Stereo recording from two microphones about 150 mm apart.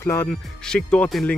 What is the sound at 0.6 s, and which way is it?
Speech, 5° left (ahead or behind).